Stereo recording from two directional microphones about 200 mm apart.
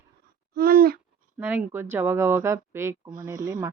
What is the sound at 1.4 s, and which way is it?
A man's voice, 10° right (ahead or behind).